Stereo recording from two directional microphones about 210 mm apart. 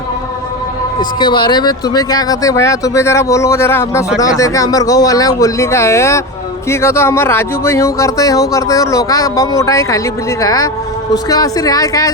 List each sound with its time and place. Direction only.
1.2 s speech: 20° left (ahead or behind)